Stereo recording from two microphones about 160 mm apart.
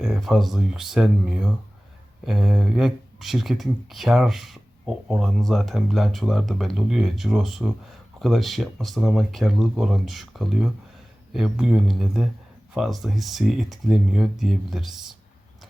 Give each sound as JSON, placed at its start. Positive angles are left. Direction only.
{"t": 0.0, "sound": "speech", "side_deg": 0}